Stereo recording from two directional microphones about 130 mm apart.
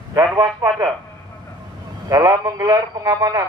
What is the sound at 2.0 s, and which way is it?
A man's voice, 30° right (ahead or behind).